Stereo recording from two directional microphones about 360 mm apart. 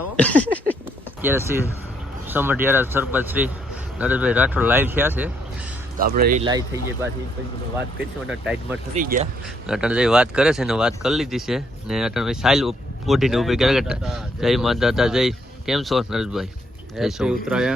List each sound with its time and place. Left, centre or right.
1.2 s speech: centre
6.0 s speech: right
6.4 s speech: centre
8.3 s speech: centre
9.0 s speech: right
9.6 s speech: centre